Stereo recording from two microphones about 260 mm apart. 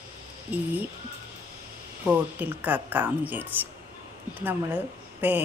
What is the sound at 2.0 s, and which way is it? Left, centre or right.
A woman's voice, centre.